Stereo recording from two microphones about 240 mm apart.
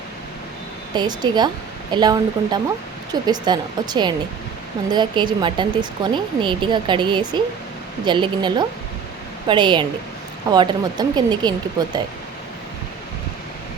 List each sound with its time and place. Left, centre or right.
0.9 s speech: centre